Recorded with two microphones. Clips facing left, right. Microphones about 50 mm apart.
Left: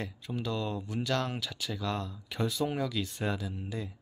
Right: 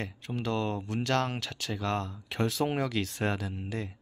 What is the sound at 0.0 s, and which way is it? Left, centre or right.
Speech, right.